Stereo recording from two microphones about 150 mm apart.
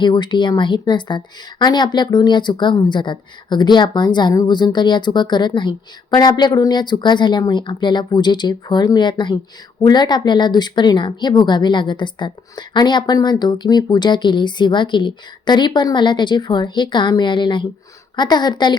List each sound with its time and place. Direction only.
0.0 s a woman's voice: 30° left (ahead or behind)